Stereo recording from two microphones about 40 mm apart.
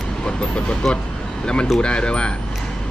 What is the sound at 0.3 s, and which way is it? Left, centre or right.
Speech, left.